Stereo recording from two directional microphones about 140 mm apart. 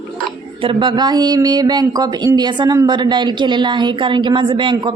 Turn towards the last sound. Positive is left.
turn(degrees=-35)  # may be behind; listen again after turning